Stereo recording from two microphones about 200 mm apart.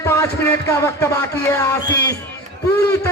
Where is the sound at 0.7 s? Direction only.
15° left (ahead or behind).